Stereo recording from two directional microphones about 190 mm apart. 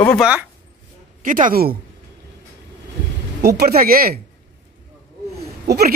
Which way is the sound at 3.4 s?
55° right (ahead or behind).